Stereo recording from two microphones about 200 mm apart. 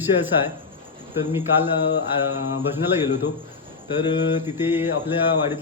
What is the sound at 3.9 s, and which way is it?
Speech, 20° left (ahead or behind).